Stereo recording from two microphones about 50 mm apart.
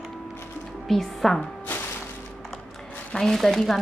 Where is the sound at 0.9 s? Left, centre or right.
Centre.